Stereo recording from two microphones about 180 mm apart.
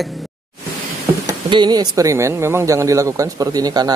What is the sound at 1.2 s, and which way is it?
Speech, 25° right (ahead or behind).